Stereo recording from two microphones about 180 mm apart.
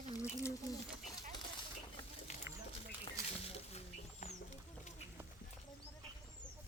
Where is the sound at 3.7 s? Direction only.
40° left (ahead or behind).